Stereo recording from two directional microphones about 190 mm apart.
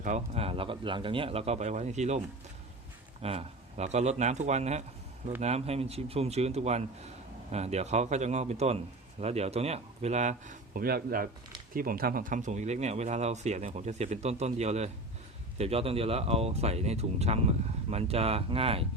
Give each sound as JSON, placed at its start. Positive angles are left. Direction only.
{"t": 0.0, "sound": "speech", "side_deg": -35}